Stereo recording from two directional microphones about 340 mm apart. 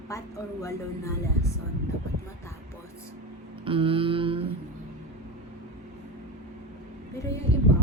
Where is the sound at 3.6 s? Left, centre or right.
Centre.